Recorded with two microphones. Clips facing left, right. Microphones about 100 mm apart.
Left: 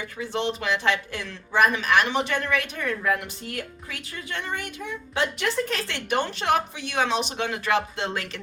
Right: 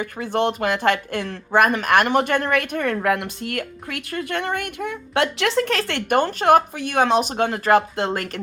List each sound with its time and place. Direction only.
0.0 s speech: 55° right (ahead or behind)